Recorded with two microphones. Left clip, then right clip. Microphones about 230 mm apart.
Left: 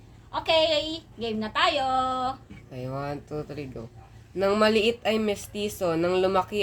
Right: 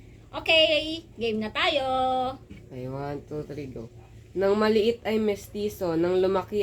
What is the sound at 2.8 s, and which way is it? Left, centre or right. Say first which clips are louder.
Speech: left 1 dB; left.